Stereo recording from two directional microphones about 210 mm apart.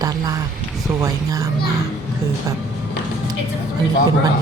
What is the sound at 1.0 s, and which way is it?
Speech, 15° right (ahead or behind).